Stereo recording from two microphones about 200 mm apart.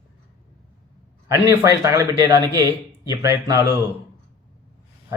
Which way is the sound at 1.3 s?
15° right (ahead or behind).